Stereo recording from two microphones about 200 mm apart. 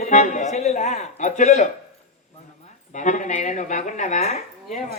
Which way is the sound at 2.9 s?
40° left (ahead or behind).